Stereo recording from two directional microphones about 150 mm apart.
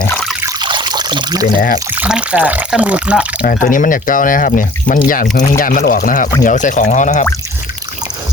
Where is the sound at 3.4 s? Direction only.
65° left (ahead or behind).